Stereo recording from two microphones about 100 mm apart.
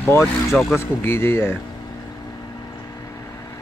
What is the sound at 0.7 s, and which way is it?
Speech, 25° left (ahead or behind).